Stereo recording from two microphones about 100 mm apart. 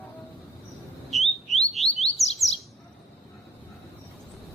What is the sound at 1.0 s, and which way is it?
Bird, centre (ahead or behind).